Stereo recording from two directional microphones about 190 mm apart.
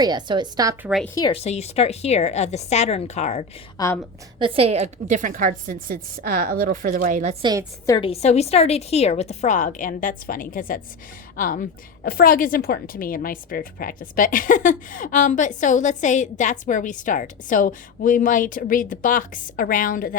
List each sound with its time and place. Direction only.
0.0 s a woman's voice: 20° right (ahead or behind)
1.0 s speech: 15° left (ahead or behind)
1.3 s a woman's voice: 35° left (ahead or behind)
3.8 s speech: 15° left (ahead or behind)
4.4 s a woman's voice: 30° right (ahead or behind)
7.9 s a woman's voice: 25° left (ahead or behind); by 20.1 s 50° left (ahead or behind)